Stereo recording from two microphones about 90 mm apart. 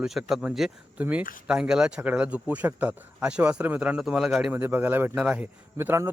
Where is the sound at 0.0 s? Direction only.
5° right (ahead or behind).